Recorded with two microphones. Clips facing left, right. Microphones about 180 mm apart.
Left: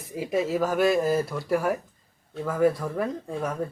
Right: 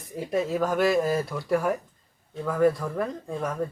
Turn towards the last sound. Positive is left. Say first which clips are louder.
# left 1 dB
turn(degrees=5)  # may be behind; listen again after turning